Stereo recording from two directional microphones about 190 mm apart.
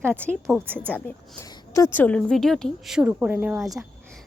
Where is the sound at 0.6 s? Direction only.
10° right (ahead or behind).